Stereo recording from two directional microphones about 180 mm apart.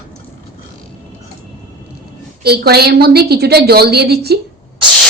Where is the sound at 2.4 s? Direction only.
60° right (ahead or behind).